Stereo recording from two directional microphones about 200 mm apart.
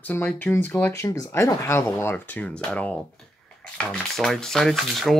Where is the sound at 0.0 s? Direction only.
5° left (ahead or behind).